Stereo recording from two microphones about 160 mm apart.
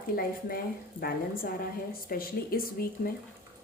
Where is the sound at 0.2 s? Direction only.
70° left (ahead or behind).